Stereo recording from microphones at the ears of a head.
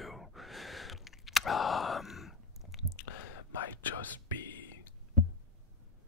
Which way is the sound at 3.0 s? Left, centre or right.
Left.